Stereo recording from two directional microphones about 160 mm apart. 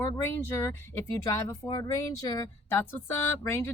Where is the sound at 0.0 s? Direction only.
15° left (ahead or behind).